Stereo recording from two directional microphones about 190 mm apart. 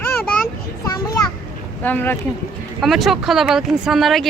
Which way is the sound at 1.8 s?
10° left (ahead or behind).